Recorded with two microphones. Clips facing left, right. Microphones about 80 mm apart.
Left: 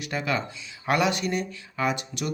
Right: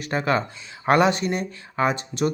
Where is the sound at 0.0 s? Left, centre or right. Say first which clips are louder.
Right 5 dB; right.